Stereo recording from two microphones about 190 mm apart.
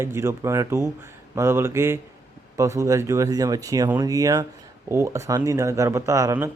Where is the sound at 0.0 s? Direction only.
15° right (ahead or behind).